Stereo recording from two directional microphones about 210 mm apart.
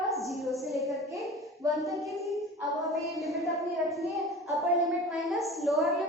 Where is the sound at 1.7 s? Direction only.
Centre (ahead or behind).